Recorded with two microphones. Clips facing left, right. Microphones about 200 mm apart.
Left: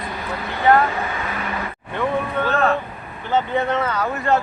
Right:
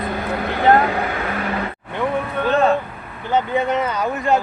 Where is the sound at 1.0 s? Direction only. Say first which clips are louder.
Right 3 dB; 60° right (ahead or behind).